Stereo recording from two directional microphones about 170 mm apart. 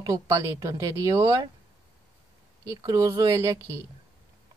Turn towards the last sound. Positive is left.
turn(degrees=-20)  # may be behind; listen again after turning